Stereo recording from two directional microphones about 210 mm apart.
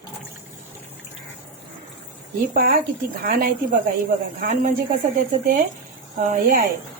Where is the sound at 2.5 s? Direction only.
45° right (ahead or behind).